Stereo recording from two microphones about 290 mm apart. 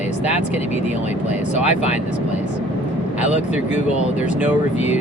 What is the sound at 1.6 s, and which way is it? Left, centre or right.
Speech, left.